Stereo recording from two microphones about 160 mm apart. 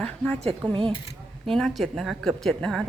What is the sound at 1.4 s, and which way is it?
Speech, centre (ahead or behind).